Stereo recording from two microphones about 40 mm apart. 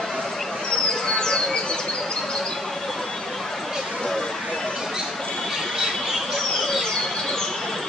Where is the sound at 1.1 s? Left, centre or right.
Centre.